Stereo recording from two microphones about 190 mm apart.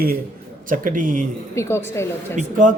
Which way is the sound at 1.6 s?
15° left (ahead or behind).